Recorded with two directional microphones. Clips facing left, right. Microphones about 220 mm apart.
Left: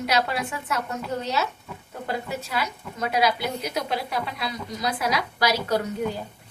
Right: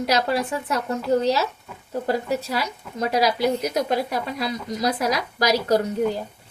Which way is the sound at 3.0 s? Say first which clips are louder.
Right 3 dB; 40° right (ahead or behind).